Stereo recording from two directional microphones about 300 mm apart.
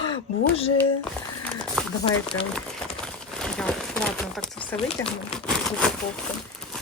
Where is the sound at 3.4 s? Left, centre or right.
Centre.